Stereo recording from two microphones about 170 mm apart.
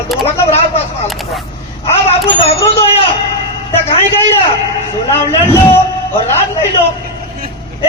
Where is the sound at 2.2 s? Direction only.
35° left (ahead or behind).